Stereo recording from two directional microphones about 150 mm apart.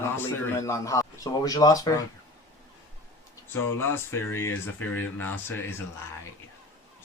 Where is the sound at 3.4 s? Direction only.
15° left (ahead or behind).